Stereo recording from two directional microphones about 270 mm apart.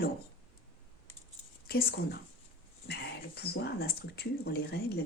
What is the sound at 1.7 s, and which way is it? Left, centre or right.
Speech, left.